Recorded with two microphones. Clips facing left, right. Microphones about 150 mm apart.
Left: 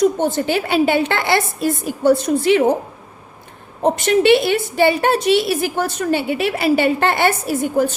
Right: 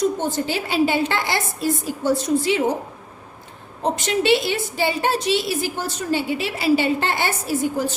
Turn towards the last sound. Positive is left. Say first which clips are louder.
# left 4 dB
turn(degrees=55)  # may be behind; listen again after turning